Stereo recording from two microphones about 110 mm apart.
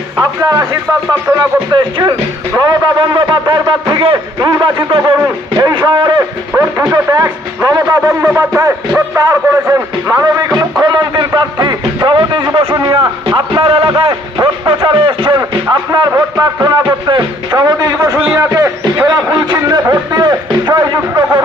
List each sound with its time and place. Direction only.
1.4 s a man's voice: 35° right (ahead or behind)
5.2 s a man's voice: 35° right (ahead or behind)
13.6 s a man's voice: 55° right (ahead or behind)
15.9 s a man's voice: 35° right (ahead or behind)